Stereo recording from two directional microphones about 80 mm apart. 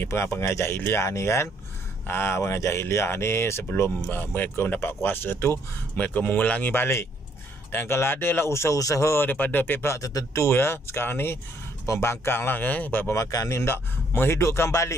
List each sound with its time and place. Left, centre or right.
0.0 s speech: left
9.8 s speech: left
13.1 s speech: left